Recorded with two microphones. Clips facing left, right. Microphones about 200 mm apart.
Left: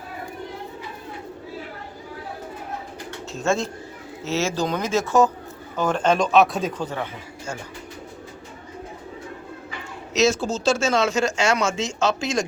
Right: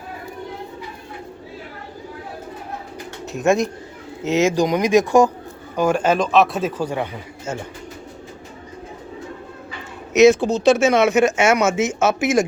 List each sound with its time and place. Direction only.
3.3 s speech: 15° right (ahead or behind)
10.1 s speech: 15° right (ahead or behind)